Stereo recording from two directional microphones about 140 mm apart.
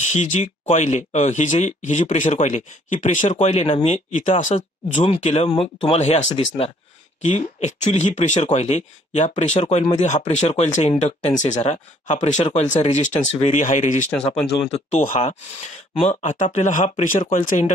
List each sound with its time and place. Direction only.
0.0 s speech: 55° left (ahead or behind)
4.1 s speech: 65° left (ahead or behind)
5.0 s speech: 45° left (ahead or behind)
7.2 s speech: 55° left (ahead or behind)
14.6 s speech: 50° left (ahead or behind)